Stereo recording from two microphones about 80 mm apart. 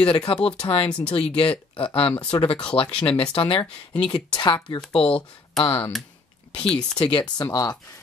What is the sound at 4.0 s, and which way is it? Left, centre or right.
Speech, left.